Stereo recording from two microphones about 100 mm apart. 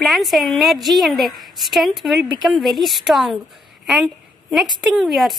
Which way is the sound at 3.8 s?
5° right (ahead or behind).